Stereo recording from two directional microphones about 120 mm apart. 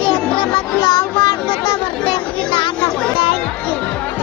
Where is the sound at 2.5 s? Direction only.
45° left (ahead or behind).